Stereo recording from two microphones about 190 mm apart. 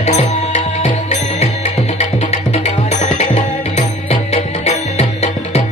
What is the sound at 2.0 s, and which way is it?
Music, 35° left (ahead or behind).